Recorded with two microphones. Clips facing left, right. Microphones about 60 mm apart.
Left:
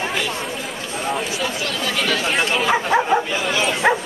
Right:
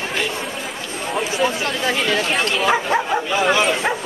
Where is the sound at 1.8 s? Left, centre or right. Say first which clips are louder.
Right 1 dB; right.